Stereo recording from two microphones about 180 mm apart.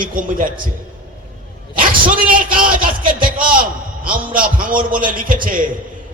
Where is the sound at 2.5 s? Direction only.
50° right (ahead or behind).